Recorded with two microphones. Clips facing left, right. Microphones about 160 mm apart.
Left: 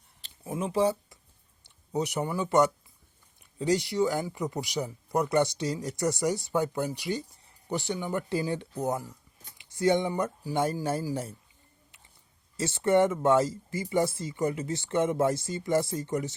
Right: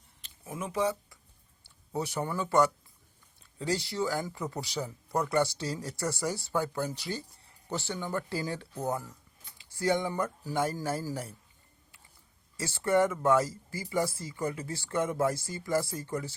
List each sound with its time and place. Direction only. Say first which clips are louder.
0.2 s a sound: left 6 dB; 30° left (ahead or behind)
1.6 s speech: left 4 dB; 20° left (ahead or behind)
12.5 s speech: left 3 dB; 25° left (ahead or behind)